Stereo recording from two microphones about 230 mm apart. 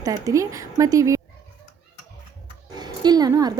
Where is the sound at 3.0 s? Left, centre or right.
Centre.